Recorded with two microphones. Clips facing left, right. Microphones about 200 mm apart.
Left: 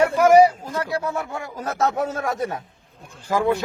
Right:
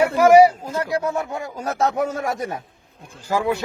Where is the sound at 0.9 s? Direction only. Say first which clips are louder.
Right 3 dB; 15° right (ahead or behind).